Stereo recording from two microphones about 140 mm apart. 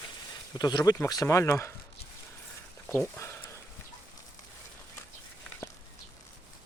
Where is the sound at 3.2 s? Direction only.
20° left (ahead or behind).